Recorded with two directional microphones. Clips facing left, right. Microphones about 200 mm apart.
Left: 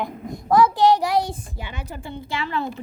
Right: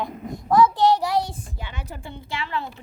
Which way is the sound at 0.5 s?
10° left (ahead or behind).